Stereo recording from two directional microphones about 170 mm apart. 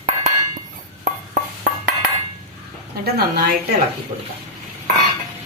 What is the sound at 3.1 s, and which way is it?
Speech, 70° right (ahead or behind).